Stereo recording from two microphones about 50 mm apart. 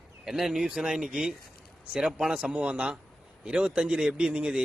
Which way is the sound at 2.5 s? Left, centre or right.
Right.